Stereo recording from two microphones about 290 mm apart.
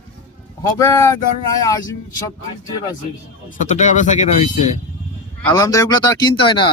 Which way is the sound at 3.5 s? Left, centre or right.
Left.